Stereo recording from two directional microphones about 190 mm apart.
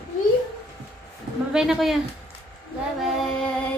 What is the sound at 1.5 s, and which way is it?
Speech, centre (ahead or behind).